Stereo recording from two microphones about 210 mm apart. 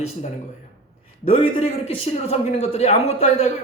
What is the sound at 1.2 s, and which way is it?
A man's voice, 25° left (ahead or behind).